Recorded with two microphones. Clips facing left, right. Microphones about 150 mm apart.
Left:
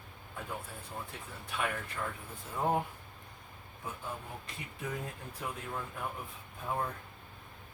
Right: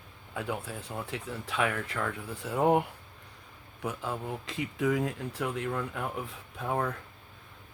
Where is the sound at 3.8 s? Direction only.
90° right.